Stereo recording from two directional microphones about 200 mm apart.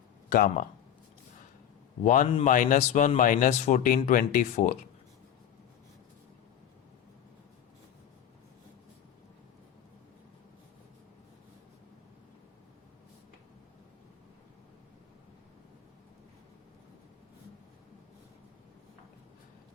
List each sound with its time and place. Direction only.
0.3 s speech: 45° left (ahead or behind)
2.0 s speech: 40° left (ahead or behind)